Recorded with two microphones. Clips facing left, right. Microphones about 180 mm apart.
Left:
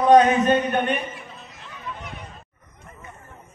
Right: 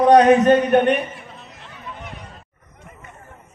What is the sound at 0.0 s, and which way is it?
Speech, 70° right (ahead or behind).